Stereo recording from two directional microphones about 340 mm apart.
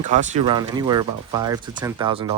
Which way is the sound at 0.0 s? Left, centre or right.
Right.